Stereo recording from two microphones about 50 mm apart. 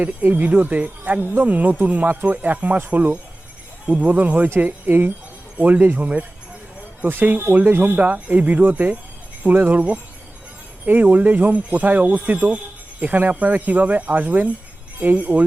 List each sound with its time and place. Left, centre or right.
0.0 s speech: right
7.0 s speech: right
10.8 s speech: right